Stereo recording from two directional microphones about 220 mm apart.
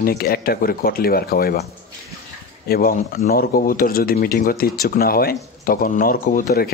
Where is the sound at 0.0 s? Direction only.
45° left (ahead or behind).